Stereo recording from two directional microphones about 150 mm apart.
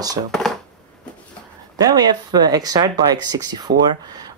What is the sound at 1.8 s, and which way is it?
Speech, 25° right (ahead or behind).